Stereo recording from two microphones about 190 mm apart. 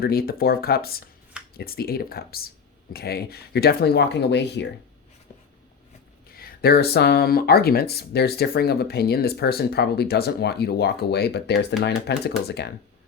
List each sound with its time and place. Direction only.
0.0 s speech: 50° left (ahead or behind)
6.3 s speech: 50° left (ahead or behind)